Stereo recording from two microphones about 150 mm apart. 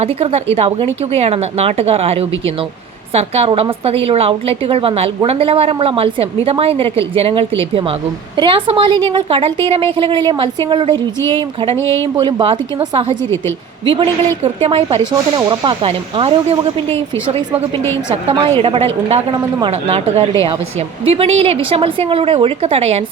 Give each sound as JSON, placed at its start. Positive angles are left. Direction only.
{"t": 0.0, "sound": "a woman's voice", "side_deg": -40}
{"t": 15.1, "sound": "a woman's voice", "side_deg": -25}
{"t": 18.1, "sound": "a woman's voice", "side_deg": -40}